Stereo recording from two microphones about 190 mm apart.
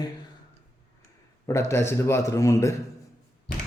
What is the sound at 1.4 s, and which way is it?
A man's voice, 15° left (ahead or behind).